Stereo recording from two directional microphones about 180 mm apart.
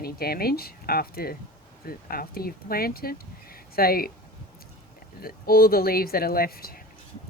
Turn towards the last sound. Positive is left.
turn(degrees=55)  # may be behind; listen again after turning